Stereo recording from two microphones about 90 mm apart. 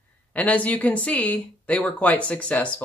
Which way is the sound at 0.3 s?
15° left (ahead or behind).